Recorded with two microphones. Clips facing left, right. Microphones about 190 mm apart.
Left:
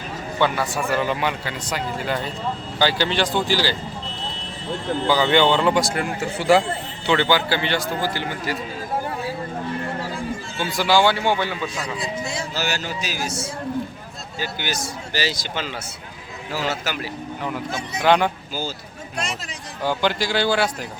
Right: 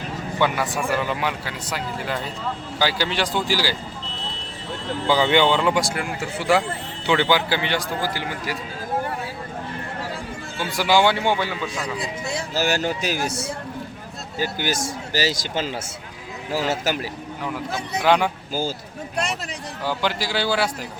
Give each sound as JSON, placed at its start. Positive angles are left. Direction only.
{"t": 0.9, "sound": "speech", "side_deg": 0}
{"t": 5.0, "sound": "speech", "side_deg": -20}
{"t": 10.8, "sound": "a man's voice", "side_deg": -20}
{"t": 12.2, "sound": "speech", "side_deg": -60}
{"t": 14.3, "sound": "a man's voice", "side_deg": -45}
{"t": 18.0, "sound": "speech", "side_deg": -5}
{"t": 19.1, "sound": "speech", "side_deg": -60}
{"t": 19.8, "sound": "speech", "side_deg": -5}